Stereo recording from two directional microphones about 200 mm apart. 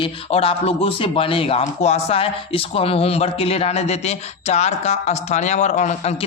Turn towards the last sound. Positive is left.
turn(degrees=35)  # may be behind; listen again after turning